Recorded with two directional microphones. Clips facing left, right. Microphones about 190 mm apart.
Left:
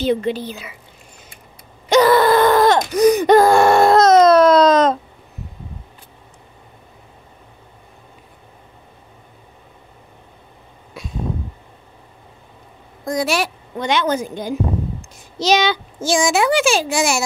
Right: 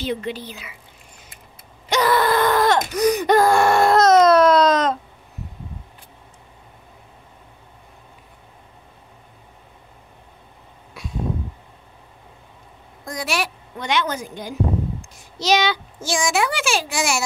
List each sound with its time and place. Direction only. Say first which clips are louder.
0.0 s speech: left 7 dB; 35° left (ahead or behind)
1.9 s gasp: left 6 dB; 30° left (ahead or behind)
13.0 s a woman's voice: left 6 dB; 25° left (ahead or behind)